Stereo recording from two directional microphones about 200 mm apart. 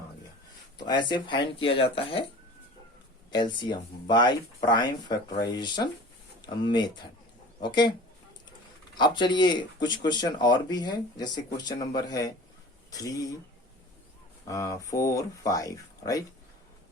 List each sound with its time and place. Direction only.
0.9 s speech: 25° left (ahead or behind)
3.3 s speech: 20° left (ahead or behind)
9.0 s speech: 20° left (ahead or behind)
14.4 s speech: 15° left (ahead or behind)